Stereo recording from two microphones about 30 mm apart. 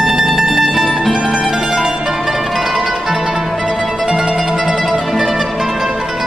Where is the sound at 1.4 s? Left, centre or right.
Centre.